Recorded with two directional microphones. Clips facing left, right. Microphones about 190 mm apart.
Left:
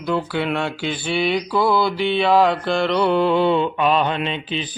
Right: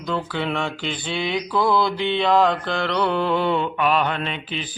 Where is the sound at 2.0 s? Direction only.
10° left (ahead or behind).